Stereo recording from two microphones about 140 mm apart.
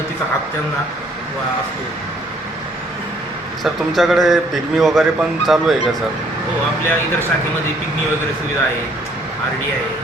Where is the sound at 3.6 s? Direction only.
Centre (ahead or behind).